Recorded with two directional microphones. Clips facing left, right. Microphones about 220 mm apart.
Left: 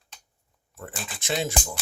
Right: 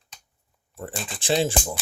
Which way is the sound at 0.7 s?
30° right (ahead or behind).